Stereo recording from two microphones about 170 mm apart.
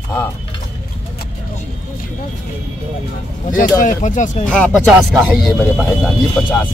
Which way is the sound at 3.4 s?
50° left (ahead or behind).